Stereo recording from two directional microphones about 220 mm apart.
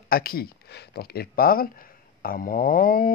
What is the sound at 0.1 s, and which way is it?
Speech, 40° left (ahead or behind).